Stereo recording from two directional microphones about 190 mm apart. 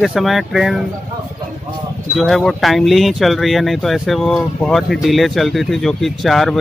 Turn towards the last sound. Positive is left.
turn(degrees=0)  # may be behind; listen again after turning